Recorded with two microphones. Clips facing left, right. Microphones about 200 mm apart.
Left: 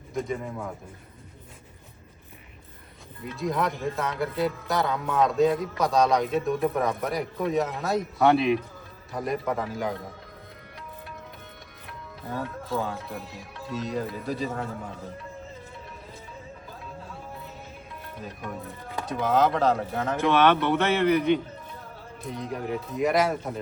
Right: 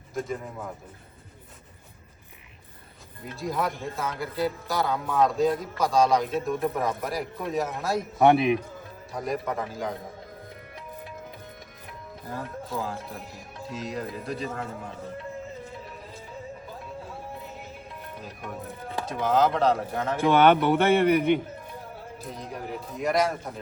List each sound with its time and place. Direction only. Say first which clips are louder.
0.1 s speech: left 2 dB; centre (ahead or behind)
3.4 s speech: left 2 dB; centre (ahead or behind)
8.2 s a man's voice: right 2 dB; 20° right (ahead or behind)
9.1 s speech: left 1 dB; centre (ahead or behind)
12.7 s speech: left 3 dB; centre (ahead or behind)
18.9 s speech: even; centre (ahead or behind)
20.3 s speech: right 3 dB; 30° right (ahead or behind)
22.2 s speech: left 5 dB; centre (ahead or behind)